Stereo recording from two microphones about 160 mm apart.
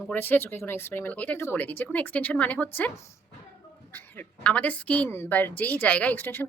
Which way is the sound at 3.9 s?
10° left (ahead or behind).